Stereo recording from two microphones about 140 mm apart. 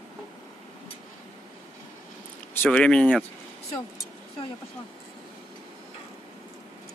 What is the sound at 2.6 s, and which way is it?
Speech, 5° left (ahead or behind).